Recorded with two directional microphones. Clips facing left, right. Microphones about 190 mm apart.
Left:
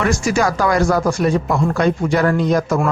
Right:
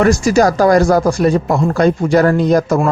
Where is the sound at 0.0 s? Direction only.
40° right (ahead or behind).